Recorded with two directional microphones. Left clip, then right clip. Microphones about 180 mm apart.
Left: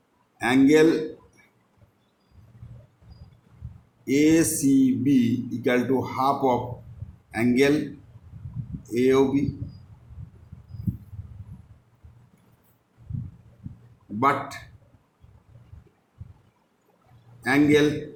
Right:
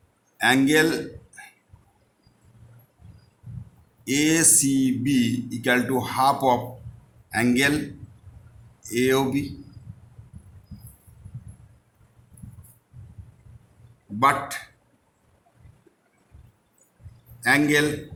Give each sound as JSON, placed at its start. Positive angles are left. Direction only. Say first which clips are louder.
{"t": 0.3, "sound": "a man's voice", "louder": "even", "side_deg": -30}
{"t": 4.0, "sound": "a man's voice", "louder": "left 1 dB", "side_deg": -30}
{"t": 8.9, "sound": "speech", "louder": "left 1 dB", "side_deg": -35}
{"t": 14.2, "sound": "a man's voice", "louder": "right 2 dB", "side_deg": -30}
{"t": 17.4, "sound": "speech", "louder": "even", "side_deg": -30}